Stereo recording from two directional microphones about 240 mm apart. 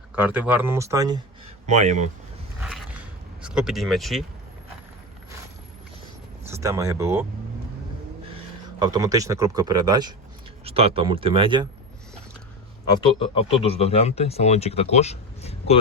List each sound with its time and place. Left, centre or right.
0.2 s speech: centre
1.6 s speech: right
2.6 s a sound: centre
6.5 s speech: centre
8.8 s speech: centre
12.9 s speech: left